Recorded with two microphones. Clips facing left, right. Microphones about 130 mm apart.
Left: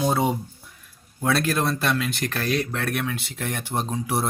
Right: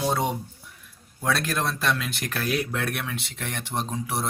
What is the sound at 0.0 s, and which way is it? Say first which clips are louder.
Speech: left 3 dB; 5° left (ahead or behind).